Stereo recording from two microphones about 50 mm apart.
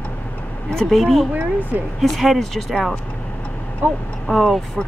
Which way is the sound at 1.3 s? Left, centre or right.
Right.